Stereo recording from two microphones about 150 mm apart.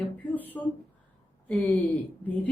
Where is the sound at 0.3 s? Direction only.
10° left (ahead or behind).